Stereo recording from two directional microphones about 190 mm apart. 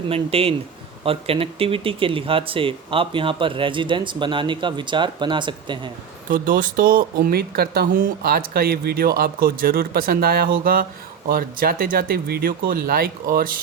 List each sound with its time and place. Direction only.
0.1 s speech: 30° right (ahead or behind)
6.3 s speech: 45° right (ahead or behind)